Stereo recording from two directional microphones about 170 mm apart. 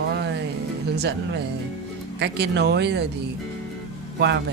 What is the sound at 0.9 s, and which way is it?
Speech, 80° right.